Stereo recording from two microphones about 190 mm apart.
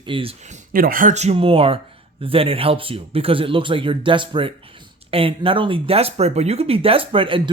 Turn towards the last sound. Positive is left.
turn(degrees=-25)  # may be behind; listen again after turning